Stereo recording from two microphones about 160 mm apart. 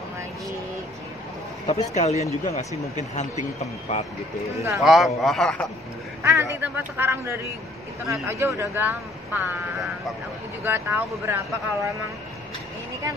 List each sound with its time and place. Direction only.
1.7 s speech: 40° left (ahead or behind)
4.8 s a man's voice: centre (ahead or behind)
6.2 s a man's voice: 15° right (ahead or behind)
10.6 s a man's voice: 15° right (ahead or behind)